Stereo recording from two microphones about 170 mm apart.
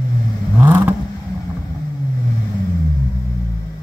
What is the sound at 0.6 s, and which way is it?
Vehicle, 10° right (ahead or behind).